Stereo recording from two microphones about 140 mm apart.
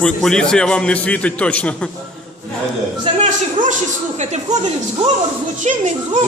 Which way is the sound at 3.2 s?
60° right (ahead or behind).